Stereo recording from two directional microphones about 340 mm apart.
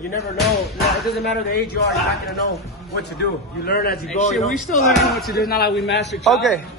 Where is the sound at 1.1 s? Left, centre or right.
Left.